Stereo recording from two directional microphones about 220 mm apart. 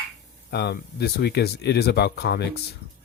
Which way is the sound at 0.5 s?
50° left (ahead or behind).